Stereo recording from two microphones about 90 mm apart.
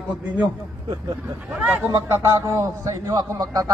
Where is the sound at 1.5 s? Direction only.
15° right (ahead or behind).